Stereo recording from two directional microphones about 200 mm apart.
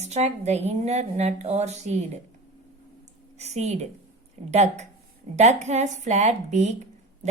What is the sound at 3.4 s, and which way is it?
Speech, 35° right (ahead or behind).